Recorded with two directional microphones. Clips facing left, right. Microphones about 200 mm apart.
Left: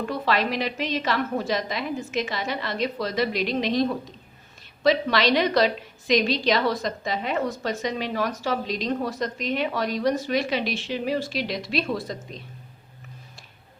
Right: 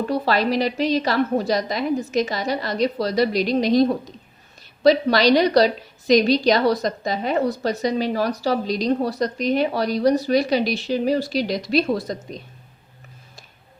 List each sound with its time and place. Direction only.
0.0 s a woman's voice: 35° right (ahead or behind)